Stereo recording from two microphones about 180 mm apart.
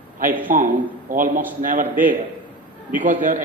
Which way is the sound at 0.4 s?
50° right (ahead or behind).